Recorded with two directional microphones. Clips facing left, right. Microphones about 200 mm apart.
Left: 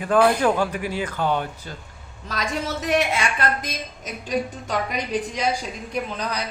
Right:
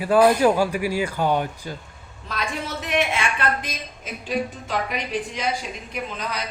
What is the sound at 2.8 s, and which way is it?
Speech, 40° left (ahead or behind).